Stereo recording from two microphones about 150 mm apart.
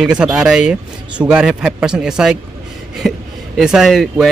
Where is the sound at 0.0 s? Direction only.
5° right (ahead or behind).